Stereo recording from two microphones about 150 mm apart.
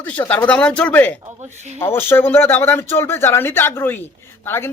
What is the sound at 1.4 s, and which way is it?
Speech, 50° right (ahead or behind).